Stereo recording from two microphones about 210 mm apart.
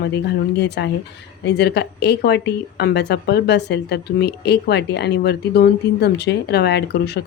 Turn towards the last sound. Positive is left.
turn(degrees=50)  # may be behind; listen again after turning